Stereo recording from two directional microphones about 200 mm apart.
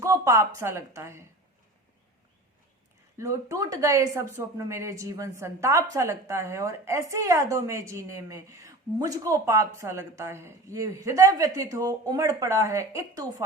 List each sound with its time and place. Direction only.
0.0 s speech: 15° right (ahead or behind)
3.2 s speech: 15° right (ahead or behind)